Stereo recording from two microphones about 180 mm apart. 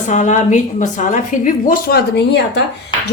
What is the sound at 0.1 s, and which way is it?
A woman's voice, 40° left (ahead or behind).